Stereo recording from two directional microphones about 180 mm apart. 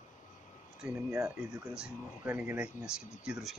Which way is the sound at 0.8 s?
5° right (ahead or behind).